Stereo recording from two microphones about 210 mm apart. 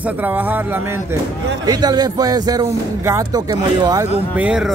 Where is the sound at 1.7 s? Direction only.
20° right (ahead or behind).